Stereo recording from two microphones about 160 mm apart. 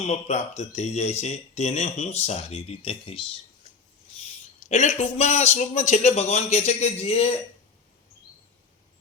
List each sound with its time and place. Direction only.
0.1 s speech: 45° left (ahead or behind)
4.7 s speech: 45° left (ahead or behind)